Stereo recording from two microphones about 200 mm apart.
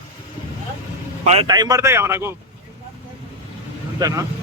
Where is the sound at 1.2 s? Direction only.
30° right (ahead or behind).